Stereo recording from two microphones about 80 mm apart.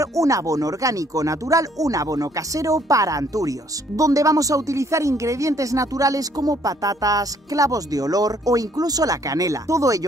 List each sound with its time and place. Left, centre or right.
0.0 s speech: right